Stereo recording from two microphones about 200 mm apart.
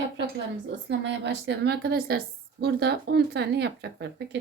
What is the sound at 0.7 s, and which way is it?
A woman's voice, 60° right (ahead or behind).